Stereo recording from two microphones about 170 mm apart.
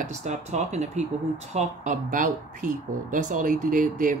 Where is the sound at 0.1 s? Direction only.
40° right (ahead or behind).